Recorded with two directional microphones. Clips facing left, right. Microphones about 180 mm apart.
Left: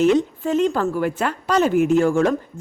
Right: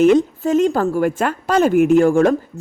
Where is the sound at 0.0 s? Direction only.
50° right (ahead or behind).